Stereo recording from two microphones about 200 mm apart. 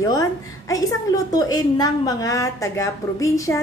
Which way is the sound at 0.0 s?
15° left (ahead or behind).